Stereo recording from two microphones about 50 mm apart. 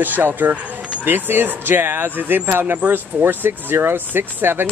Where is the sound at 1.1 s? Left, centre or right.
Right.